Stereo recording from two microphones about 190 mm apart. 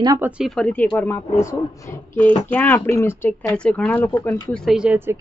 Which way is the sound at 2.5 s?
10° left (ahead or behind).